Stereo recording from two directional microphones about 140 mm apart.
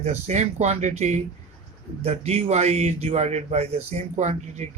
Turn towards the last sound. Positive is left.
turn(degrees=-55)  # may be behind; listen again after turning